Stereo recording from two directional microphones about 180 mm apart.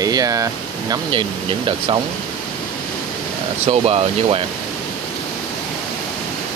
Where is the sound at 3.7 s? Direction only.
35° right (ahead or behind).